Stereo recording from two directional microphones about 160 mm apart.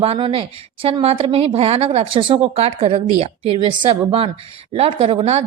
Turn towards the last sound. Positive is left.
turn(degrees=-40)  # may be behind; listen again after turning